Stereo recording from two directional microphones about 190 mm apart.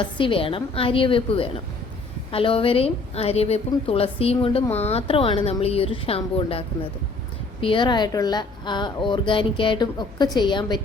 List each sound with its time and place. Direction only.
0.0 s a woman's voice: 25° left (ahead or behind)